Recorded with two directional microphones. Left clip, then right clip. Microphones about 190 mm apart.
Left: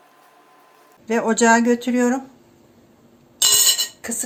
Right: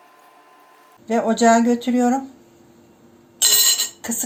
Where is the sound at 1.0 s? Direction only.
20° left (ahead or behind).